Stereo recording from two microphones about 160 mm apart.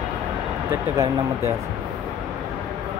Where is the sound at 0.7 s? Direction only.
15° right (ahead or behind).